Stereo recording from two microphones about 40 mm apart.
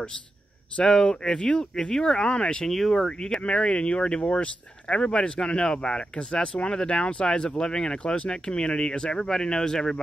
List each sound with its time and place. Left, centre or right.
0.7 s speech: centre
1.8 s speech: centre
2.7 s speech: centre
3.0 s speech: centre